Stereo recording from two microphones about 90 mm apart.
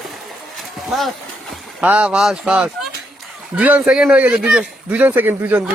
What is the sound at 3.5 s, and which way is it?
Speech, 15° right (ahead or behind).